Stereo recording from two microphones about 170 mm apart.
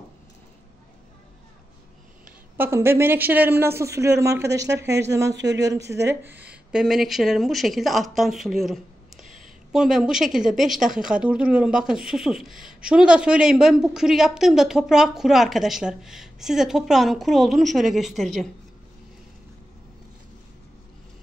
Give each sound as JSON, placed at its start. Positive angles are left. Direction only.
{"t": 2.5, "sound": "a woman's voice", "side_deg": -15}